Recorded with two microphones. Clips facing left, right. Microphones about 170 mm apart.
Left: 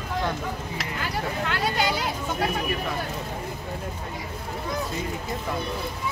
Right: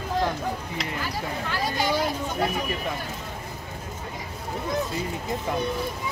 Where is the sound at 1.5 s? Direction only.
70° left (ahead or behind).